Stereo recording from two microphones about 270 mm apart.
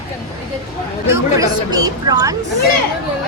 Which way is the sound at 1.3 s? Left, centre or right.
Centre.